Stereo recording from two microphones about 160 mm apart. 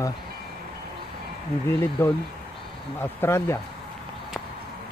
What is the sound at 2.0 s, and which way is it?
Mantra, 15° left (ahead or behind).